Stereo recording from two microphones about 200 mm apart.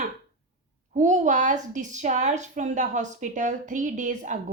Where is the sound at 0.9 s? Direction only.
35° right (ahead or behind).